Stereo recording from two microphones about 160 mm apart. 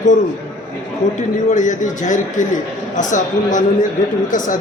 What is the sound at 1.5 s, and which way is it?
A woman's voice, 50° left (ahead or behind).